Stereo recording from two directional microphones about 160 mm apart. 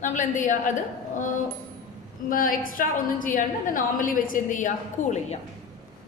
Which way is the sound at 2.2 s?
60° left (ahead or behind).